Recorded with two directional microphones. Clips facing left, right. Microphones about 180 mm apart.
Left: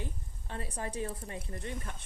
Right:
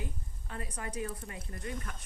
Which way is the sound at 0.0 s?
30° left (ahead or behind).